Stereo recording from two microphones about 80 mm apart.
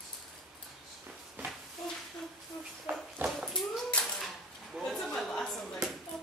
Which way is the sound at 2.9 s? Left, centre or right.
Right.